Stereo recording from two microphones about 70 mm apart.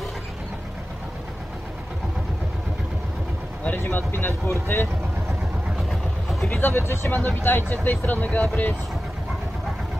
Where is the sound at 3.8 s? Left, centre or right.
Left.